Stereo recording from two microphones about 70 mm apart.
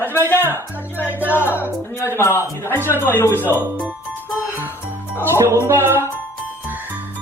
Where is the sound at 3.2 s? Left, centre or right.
Right.